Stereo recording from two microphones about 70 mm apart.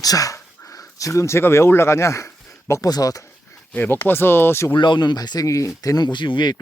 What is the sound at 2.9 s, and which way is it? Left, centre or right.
Speech, left.